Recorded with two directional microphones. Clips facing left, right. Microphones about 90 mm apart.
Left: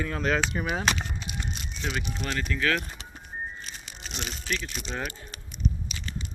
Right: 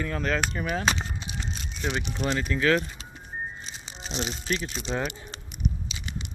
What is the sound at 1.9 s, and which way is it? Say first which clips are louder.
Speech: right 4 dB; 20° right (ahead or behind).